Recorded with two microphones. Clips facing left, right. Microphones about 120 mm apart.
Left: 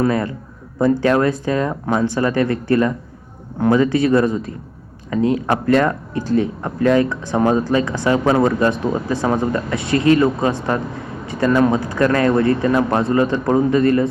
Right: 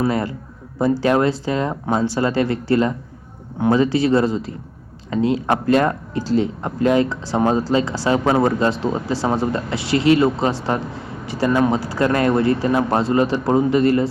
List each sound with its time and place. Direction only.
0.8 s speech: 25° right (ahead or behind)